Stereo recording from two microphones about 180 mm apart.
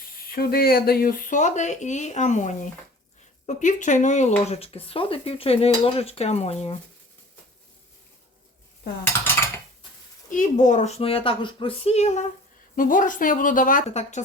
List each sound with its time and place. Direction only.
0.3 s speech: 55° left (ahead or behind); by 6.7 s 35° left (ahead or behind)
10.2 s speech: 45° left (ahead or behind)